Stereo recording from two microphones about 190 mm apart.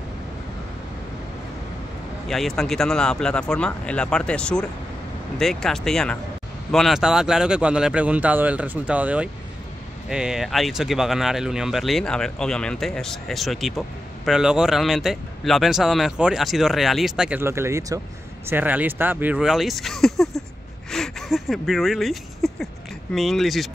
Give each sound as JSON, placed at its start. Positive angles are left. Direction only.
{"t": 2.2, "sound": "speech", "side_deg": 0}